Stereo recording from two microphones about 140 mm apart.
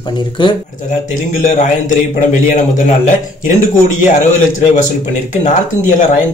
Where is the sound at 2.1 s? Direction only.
65° left (ahead or behind).